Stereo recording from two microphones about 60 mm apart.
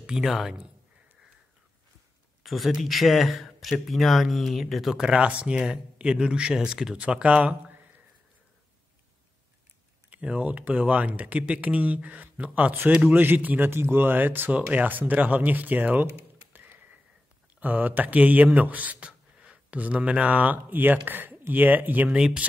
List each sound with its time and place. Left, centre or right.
0.0 s speech: centre
2.4 s speech: centre
4.9 s speech: centre
10.0 s speech: right
13.1 s speech: right
22.1 s speech: centre